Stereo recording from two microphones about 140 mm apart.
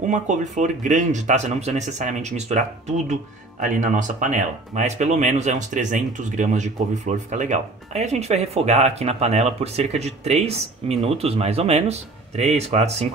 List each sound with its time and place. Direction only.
0.0 s speech: 60° right (ahead or behind)
3.1 s speech: 65° right (ahead or behind)